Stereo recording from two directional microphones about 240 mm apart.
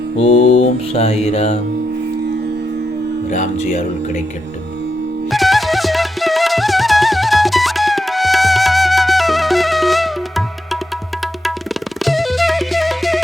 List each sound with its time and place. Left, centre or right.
0.2 s mantra: left
3.2 s speech: left
5.3 s music: centre